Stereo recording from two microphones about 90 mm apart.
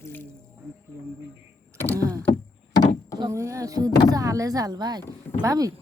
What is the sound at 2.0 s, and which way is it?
Rowboat, 40° right (ahead or behind).